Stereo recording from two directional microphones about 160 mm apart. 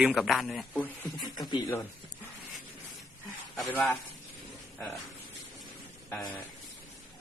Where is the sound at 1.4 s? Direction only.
25° left (ahead or behind).